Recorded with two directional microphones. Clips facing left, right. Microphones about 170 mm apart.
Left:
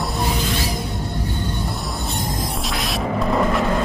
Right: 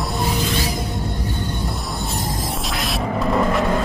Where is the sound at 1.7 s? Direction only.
Centre (ahead or behind).